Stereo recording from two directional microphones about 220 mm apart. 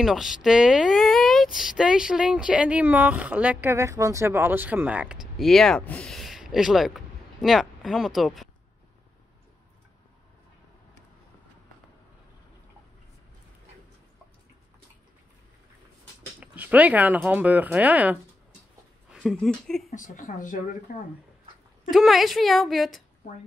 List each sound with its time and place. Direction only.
0.0 s speech: centre (ahead or behind)
16.3 s speech: 5° right (ahead or behind)
19.9 s speech: 35° left (ahead or behind)
21.9 s speech: centre (ahead or behind)